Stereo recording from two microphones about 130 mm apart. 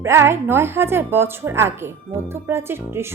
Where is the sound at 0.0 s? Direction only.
20° right (ahead or behind).